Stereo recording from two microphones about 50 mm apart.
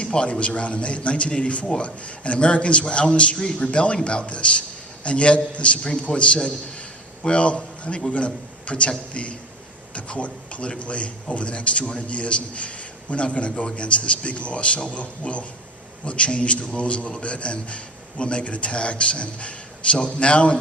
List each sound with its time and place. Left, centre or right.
0.0 s a man's voice: left